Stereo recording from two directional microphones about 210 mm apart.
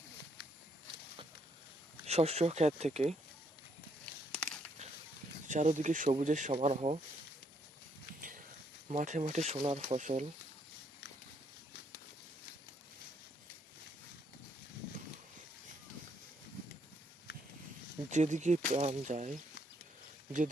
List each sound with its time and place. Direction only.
2.0 s speech: 30° right (ahead or behind)
4.3 s a sound: 5° left (ahead or behind)
5.5 s speech: 35° right (ahead or behind)
8.9 s speech: 35° right (ahead or behind)
18.1 s speech: 35° right (ahead or behind)